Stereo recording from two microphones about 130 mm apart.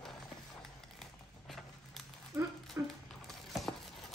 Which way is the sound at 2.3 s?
25° right (ahead or behind).